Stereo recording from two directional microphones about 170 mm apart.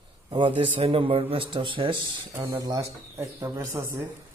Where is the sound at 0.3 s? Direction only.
30° right (ahead or behind).